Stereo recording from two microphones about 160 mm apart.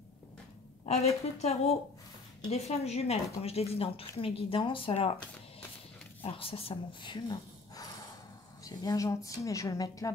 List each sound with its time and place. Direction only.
0.8 s a woman's voice: 40° left (ahead or behind)
6.2 s a woman's voice: 35° left (ahead or behind)